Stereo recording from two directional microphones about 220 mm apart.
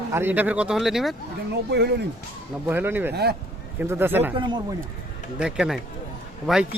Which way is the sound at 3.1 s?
45° right (ahead or behind).